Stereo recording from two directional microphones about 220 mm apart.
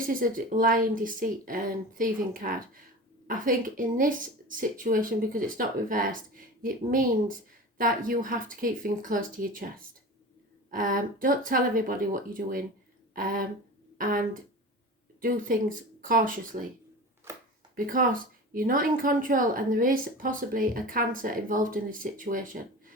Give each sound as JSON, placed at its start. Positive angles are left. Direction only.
{"t": 0.0, "sound": "speech", "side_deg": -40}
{"t": 17.7, "sound": "speech", "side_deg": -40}